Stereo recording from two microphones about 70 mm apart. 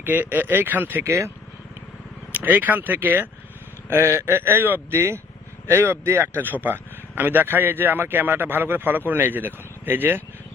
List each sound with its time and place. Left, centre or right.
0.0 s speech: right
2.3 s speech: right